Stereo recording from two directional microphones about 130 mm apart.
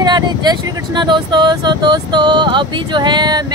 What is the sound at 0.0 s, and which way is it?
Speech, 35° right (ahead or behind).